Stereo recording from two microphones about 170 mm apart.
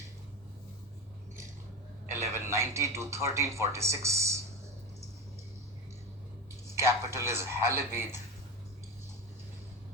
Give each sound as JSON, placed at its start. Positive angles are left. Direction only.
{"t": 2.1, "sound": "speech", "side_deg": -15}
{"t": 6.7, "sound": "speech", "side_deg": -15}